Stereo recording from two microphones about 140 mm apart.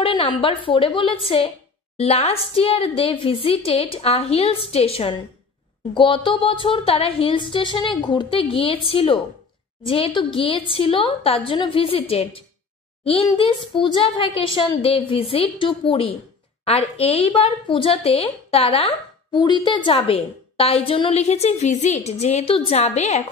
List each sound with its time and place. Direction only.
0.0 s a woman's voice: 40° left (ahead or behind)
19.4 s a woman's voice: 35° left (ahead or behind); by 23.2 s 55° left (ahead or behind)